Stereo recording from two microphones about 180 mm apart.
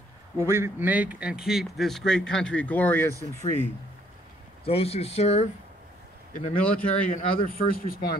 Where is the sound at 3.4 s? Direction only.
35° right (ahead or behind).